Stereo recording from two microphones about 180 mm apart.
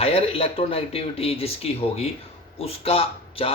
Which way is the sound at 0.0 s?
35° left (ahead or behind).